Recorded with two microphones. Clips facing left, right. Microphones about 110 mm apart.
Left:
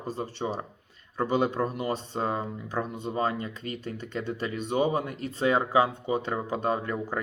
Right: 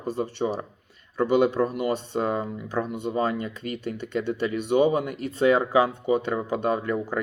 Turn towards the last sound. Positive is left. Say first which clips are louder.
# right 4 dB
turn(degrees=35)  # may be behind; listen again after turning